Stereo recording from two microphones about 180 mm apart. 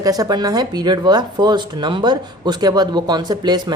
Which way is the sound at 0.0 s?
20° right (ahead or behind).